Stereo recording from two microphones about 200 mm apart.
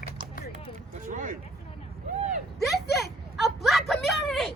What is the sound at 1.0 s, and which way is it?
Speech, 40° right (ahead or behind).